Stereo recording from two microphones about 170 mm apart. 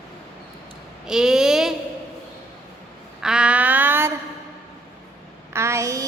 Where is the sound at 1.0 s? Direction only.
5° right (ahead or behind).